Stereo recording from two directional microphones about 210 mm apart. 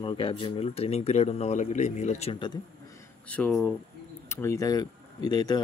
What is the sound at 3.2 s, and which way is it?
Speech, 5° left (ahead or behind).